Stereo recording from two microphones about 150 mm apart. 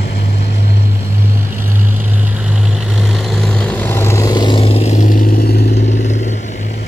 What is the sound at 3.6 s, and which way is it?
Vehicle, 10° left (ahead or behind).